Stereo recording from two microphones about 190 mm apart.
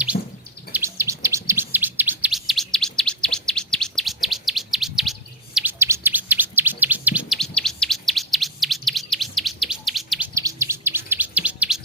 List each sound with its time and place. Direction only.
0.1 s bird: 50° left (ahead or behind)
0.7 s chirp: 15° right (ahead or behind)
5.5 s bird: 10° right (ahead or behind)
10.3 s chirp: 15° right (ahead or behind)